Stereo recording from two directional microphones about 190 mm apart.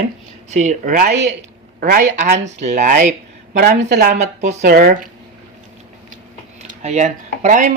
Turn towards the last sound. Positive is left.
turn(degrees=-40)  # may be behind; listen again after turning